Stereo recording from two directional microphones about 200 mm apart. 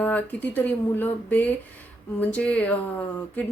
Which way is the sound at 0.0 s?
10° left (ahead or behind).